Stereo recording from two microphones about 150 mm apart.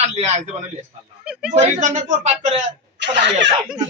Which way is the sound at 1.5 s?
50° right (ahead or behind).